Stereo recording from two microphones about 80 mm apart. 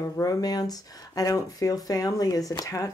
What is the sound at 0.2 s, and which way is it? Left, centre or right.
Speech, left.